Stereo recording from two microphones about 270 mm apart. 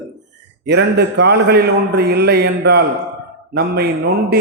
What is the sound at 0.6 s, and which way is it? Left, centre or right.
Mantra, right.